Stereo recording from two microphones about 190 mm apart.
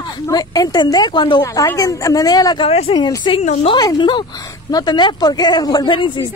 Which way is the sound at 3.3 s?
30° left (ahead or behind).